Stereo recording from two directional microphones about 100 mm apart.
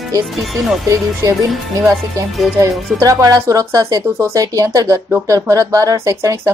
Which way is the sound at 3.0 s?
35° right (ahead or behind).